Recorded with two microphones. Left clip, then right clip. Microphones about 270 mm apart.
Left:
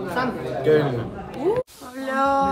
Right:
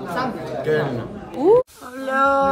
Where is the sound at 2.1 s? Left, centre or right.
Centre.